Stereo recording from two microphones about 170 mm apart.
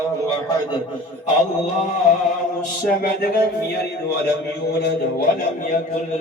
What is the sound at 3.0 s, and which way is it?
Music, 60° left (ahead or behind).